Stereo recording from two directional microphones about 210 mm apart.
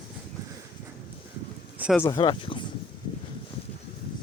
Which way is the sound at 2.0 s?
20° left (ahead or behind).